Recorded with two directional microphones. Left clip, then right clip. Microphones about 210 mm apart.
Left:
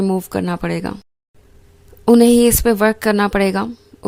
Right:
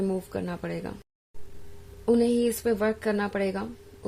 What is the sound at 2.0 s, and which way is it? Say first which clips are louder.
A woman's voice: left 12 dB; 45° left (ahead or behind).